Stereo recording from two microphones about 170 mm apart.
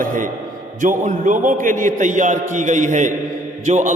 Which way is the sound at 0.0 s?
50° right (ahead or behind).